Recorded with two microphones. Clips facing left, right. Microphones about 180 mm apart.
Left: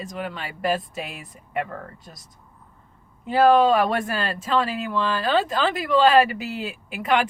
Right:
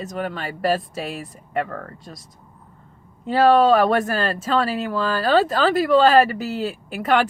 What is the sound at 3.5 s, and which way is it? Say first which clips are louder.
Speech: right 3 dB; 40° right (ahead or behind).